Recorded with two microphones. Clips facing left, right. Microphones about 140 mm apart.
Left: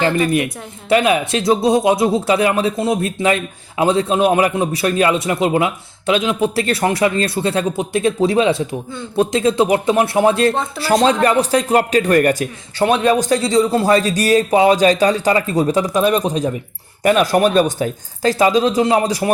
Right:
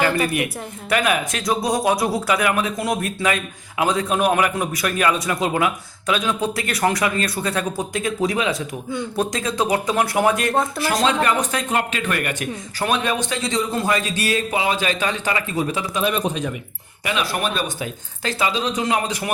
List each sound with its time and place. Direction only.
0.0 s a man's voice: 25° left (ahead or behind)
17.0 s a man's voice: 45° left (ahead or behind)